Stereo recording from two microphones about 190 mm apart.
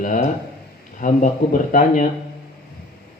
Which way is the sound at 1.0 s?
45° left (ahead or behind).